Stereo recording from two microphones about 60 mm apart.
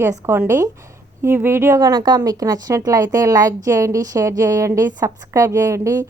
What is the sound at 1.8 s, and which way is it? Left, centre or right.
A woman's voice, right.